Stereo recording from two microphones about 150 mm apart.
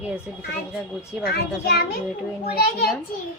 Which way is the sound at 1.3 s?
90° left.